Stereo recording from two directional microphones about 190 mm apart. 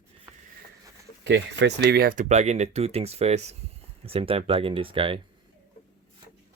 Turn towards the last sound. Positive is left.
turn(degrees=-30)  # may be behind; listen again after turning